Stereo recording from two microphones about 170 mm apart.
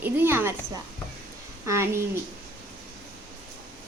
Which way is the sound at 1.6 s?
15° right (ahead or behind).